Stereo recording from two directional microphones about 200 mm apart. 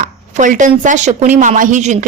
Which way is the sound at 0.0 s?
40° right (ahead or behind).